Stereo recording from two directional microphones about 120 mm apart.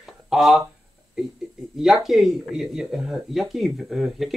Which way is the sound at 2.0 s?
Centre (ahead or behind).